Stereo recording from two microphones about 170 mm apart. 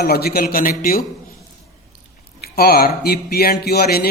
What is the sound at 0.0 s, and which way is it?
Speech, 65° left (ahead or behind).